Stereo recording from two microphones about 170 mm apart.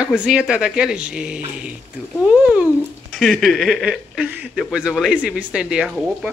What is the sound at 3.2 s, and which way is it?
Speech, centre (ahead or behind).